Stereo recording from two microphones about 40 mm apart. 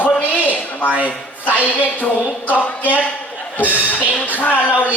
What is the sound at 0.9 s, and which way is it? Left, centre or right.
Speech, right.